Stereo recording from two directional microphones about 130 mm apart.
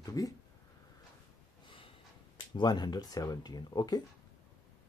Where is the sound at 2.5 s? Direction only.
35° left (ahead or behind).